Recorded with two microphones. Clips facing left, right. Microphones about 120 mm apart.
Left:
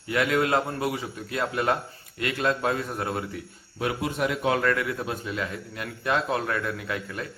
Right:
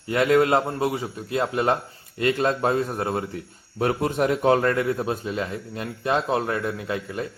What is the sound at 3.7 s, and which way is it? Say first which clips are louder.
A man's voice: right 5 dB; 40° right (ahead or behind).